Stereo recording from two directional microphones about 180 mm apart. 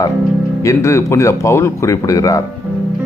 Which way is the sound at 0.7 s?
15° left (ahead or behind).